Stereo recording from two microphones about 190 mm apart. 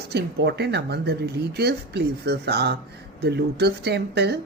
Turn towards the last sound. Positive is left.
turn(degrees=-60)  # may be behind; listen again after turning